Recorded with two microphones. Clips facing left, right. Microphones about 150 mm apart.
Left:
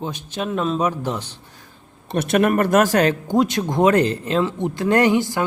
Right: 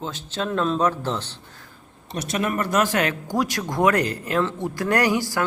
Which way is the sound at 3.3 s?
25° left (ahead or behind).